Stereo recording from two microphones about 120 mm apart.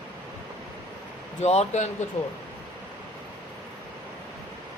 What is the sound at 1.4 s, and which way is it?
Speech, 65° left (ahead or behind).